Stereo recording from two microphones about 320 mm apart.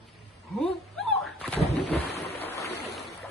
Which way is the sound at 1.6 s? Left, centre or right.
Left.